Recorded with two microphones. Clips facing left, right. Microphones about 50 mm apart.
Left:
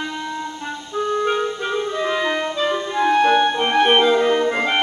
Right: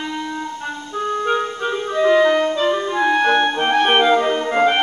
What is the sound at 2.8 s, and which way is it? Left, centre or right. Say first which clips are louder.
Clarinet: even; centre.